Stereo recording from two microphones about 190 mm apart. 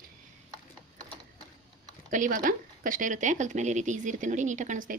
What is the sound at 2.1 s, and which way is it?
Speech, 45° right (ahead or behind).